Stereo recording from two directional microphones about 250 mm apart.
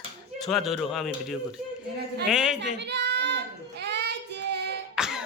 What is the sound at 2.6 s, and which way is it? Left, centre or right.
Child singing, right.